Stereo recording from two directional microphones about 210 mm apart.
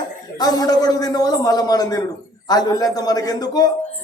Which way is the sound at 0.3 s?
20° left (ahead or behind).